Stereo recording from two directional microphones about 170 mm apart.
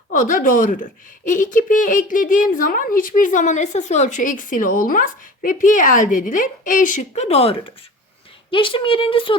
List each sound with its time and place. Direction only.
0.1 s a woman's voice: 50° left (ahead or behind)
7.1 s speech: 35° left (ahead or behind)